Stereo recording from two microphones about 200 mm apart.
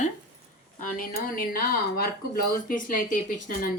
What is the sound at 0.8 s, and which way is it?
Speech, 45° left (ahead or behind).